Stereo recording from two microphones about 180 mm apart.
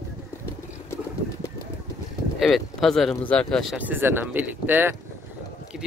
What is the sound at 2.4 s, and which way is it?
Speech, centre (ahead or behind).